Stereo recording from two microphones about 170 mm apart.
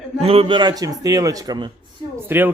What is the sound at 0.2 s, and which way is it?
A man's voice, 35° right (ahead or behind).